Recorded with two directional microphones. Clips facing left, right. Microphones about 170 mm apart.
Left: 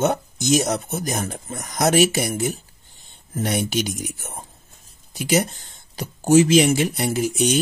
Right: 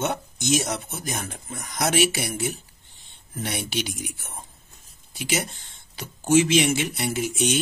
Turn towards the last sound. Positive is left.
turn(degrees=40)  # may be behind; listen again after turning